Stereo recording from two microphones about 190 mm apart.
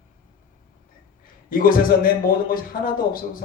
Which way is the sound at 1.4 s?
50° left (ahead or behind).